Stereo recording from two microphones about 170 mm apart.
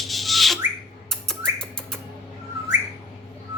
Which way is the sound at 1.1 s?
5° left (ahead or behind).